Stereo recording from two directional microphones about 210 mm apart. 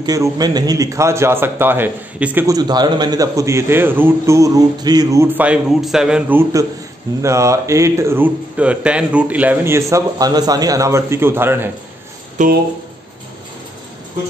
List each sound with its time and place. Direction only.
0.0 s a man's voice: 20° right (ahead or behind)
12.4 s speech: 35° right (ahead or behind)